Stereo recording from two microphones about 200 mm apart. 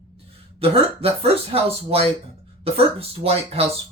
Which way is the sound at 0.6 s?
30° right (ahead or behind).